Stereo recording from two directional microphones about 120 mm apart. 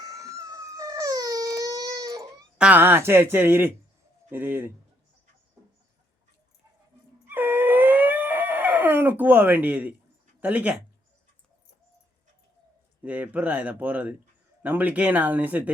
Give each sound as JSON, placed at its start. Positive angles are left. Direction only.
{"t": 0.0, "sound": "baby cry", "side_deg": -30}
{"t": 2.6, "sound": "speech", "side_deg": -10}
{"t": 7.3, "sound": "howl", "side_deg": -15}
{"t": 10.4, "sound": "speech", "side_deg": -15}
{"t": 13.0, "sound": "speech", "side_deg": -15}